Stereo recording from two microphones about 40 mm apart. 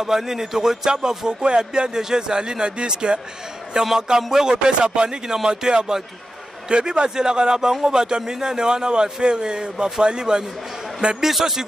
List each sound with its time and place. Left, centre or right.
0.0 s music: centre
3.7 s speech: centre
6.7 s music: right
7.8 s speech: centre
8.2 s music: centre
11.1 s speech: centre